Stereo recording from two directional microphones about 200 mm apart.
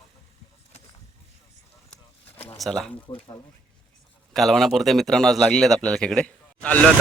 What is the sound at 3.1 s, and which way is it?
Speech, 25° left (ahead or behind).